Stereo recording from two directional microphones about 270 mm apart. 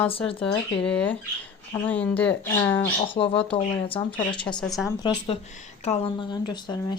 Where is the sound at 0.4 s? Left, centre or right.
Centre.